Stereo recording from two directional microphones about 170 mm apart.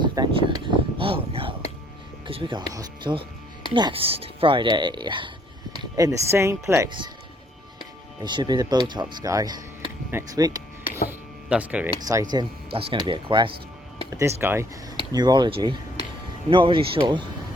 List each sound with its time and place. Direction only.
0.0 s a sound: 25° right (ahead or behind)
2.2 s speech: 30° right (ahead or behind)
8.2 s speech: 25° right (ahead or behind)
11.4 s speech: 10° right (ahead or behind)
11.9 s speech: 20° right (ahead or behind)
14.2 s speech: 15° right (ahead or behind)